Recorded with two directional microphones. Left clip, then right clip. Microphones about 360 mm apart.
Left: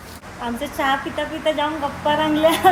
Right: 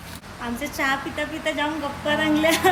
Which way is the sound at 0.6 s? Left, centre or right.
Centre.